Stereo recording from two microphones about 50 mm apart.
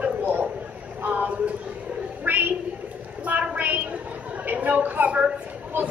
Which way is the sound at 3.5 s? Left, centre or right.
Right.